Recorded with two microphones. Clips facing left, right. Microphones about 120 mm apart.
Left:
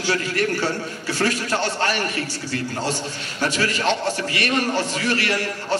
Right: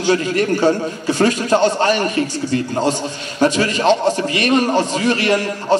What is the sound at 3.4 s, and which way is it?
A man's voice, 20° right (ahead or behind).